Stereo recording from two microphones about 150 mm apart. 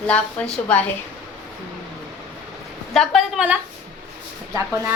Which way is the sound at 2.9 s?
Centre (ahead or behind).